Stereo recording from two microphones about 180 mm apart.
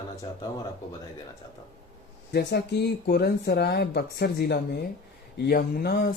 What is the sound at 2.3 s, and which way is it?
Speech, 65° left (ahead or behind).